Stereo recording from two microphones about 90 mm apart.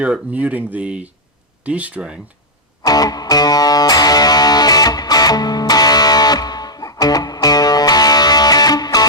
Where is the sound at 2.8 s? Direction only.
45° left (ahead or behind).